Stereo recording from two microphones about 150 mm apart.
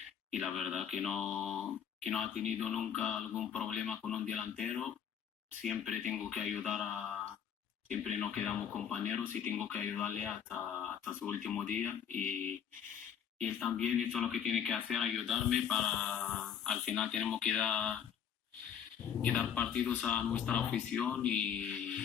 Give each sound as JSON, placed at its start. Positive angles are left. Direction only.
{"t": 0.3, "sound": "speech", "side_deg": 0}
{"t": 19.2, "sound": "speech", "side_deg": 5}